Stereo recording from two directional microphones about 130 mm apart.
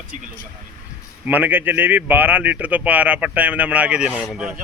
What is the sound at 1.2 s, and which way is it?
Speech, 15° right (ahead or behind).